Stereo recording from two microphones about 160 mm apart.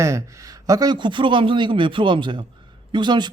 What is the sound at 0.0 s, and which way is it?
Speech, 20° right (ahead or behind).